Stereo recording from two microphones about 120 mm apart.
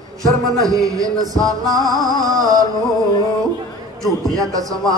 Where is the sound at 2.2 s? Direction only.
30° right (ahead or behind).